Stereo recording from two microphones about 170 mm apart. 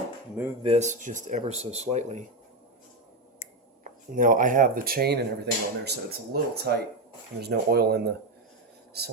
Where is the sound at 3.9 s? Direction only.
50° right (ahead or behind).